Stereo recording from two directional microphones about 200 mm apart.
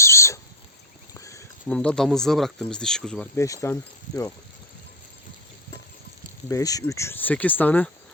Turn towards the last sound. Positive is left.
turn(degrees=10)  # may be behind; listen again after turning